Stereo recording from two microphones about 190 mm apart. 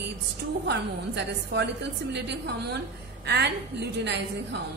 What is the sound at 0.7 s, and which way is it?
A woman's voice, 65° right (ahead or behind).